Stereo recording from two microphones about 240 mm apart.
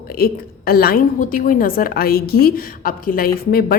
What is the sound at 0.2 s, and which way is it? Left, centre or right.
A woman's voice, left.